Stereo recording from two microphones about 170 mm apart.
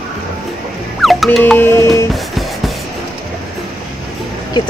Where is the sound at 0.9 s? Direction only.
Centre (ahead or behind).